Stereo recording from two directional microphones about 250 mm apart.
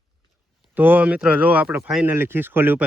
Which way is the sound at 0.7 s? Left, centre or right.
Centre.